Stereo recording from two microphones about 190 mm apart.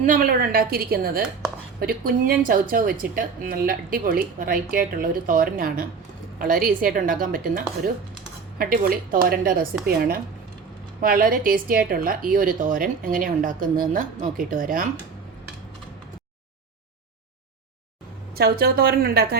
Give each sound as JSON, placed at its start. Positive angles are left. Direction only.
{"t": 0.0, "sound": "a woman's voice", "side_deg": -50}
{"t": 18.3, "sound": "a woman's voice", "side_deg": -55}